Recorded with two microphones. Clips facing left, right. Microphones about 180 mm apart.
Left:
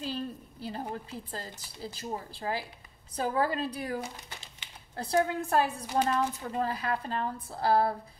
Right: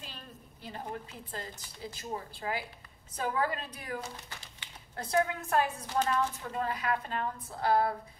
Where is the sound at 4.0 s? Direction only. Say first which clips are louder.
Left 3 dB; 20° left (ahead or behind).